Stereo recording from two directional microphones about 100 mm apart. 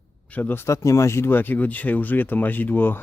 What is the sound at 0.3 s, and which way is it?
Speech, 15° left (ahead or behind).